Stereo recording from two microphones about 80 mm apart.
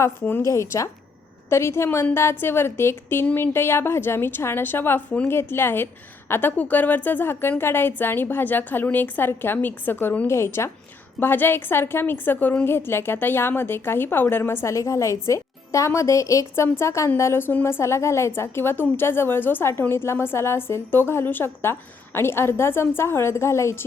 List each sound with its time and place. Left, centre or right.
0.0 s a woman's voice: left
0.4 s a woman's voice: left; by 5.3 s centre
5.3 s a woman's voice: left